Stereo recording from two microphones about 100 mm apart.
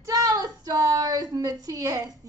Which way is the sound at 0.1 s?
40° right (ahead or behind).